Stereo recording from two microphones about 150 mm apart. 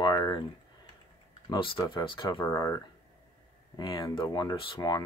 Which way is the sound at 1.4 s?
35° left (ahead or behind).